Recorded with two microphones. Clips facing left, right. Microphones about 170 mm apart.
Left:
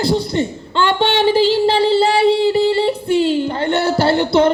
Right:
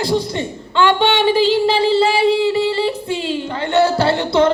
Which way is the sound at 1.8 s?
35° left (ahead or behind).